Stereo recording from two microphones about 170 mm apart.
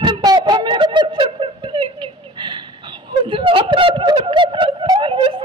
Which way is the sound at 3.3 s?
30° right (ahead or behind).